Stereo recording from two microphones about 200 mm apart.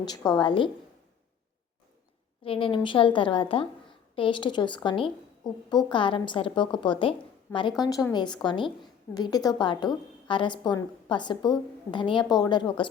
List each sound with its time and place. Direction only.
0.1 s a woman's voice: 20° left (ahead or behind)
2.4 s a woman's voice: 25° left (ahead or behind)